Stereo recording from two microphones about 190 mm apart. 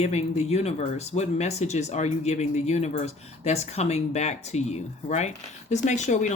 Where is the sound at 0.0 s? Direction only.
35° left (ahead or behind).